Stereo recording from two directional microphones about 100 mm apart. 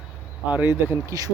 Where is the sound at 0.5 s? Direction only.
20° right (ahead or behind).